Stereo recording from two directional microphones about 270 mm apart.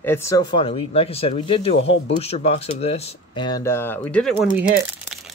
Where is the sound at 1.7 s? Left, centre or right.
Left.